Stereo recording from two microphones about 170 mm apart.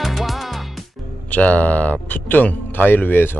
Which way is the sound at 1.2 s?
10° left (ahead or behind).